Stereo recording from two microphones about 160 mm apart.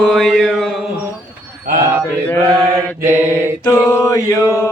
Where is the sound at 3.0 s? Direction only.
15° right (ahead or behind).